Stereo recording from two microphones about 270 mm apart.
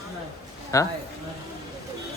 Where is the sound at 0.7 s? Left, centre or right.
Centre.